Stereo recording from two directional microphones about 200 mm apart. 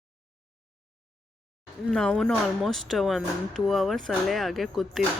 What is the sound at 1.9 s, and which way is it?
A woman's voice, 5° left (ahead or behind).